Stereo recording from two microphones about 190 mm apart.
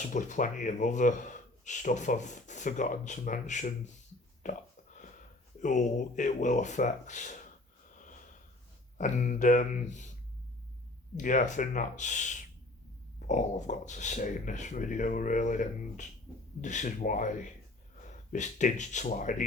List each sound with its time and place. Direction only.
0.1 s speech: 40° left (ahead or behind)
9.0 s speech: 40° left (ahead or behind)
11.2 s speech: 40° left (ahead or behind)